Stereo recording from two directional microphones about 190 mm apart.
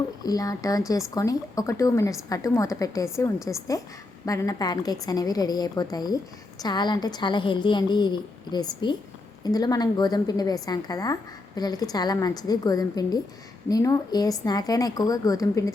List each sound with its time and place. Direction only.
0.2 s a woman's voice: 20° left (ahead or behind)